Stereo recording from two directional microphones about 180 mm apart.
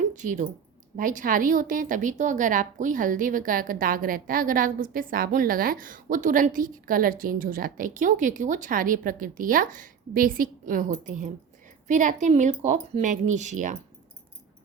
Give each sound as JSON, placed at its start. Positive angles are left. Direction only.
{"t": 0.2, "sound": "a woman's voice", "side_deg": -45}